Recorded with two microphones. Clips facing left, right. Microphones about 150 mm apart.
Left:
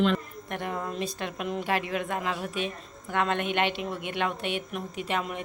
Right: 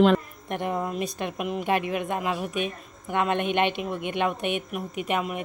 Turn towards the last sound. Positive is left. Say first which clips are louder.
# right 3 dB
turn(degrees=-15)  # may be behind; listen again after turning